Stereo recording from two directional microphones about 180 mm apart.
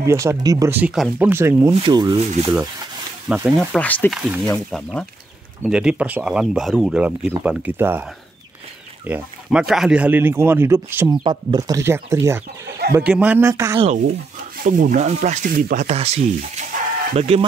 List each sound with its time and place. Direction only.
0.0 s speech: 15° right (ahead or behind)
1.7 s speech: 25° right (ahead or behind)
2.1 s speech: 35° right (ahead or behind)
3.3 s speech: 5° right (ahead or behind)
3.7 s speech: 10° left (ahead or behind)
4.1 s speech: centre (ahead or behind)
11.2 s speech: 25° right (ahead or behind)
14.6 s speech: 50° right (ahead or behind)